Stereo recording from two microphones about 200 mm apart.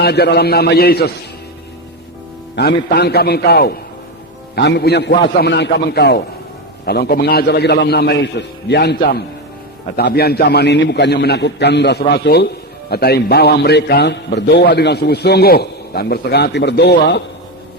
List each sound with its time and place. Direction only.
0.0 s a man's voice: 55° left (ahead or behind)
2.6 s a man's voice: 55° left (ahead or behind)